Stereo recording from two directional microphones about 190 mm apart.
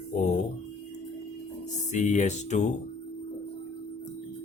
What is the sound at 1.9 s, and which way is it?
Speech, 40° left (ahead or behind).